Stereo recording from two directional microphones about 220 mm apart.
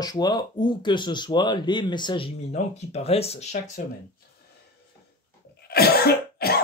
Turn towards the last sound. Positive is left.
turn(degrees=45)  # may be behind; listen again after turning